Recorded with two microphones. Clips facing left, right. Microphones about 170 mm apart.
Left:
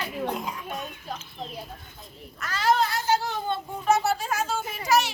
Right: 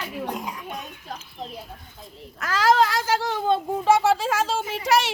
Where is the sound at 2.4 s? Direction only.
90° right.